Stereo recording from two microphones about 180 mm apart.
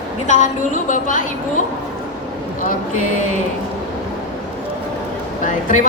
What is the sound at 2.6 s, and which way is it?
Speech, 45° left (ahead or behind).